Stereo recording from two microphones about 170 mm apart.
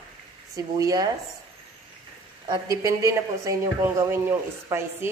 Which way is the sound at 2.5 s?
20° right (ahead or behind).